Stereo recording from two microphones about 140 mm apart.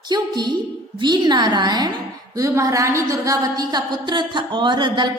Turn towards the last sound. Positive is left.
turn(degrees=-35)  # may be behind; listen again after turning